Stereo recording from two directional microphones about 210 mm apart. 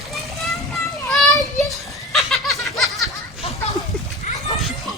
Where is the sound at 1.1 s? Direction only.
Centre (ahead or behind).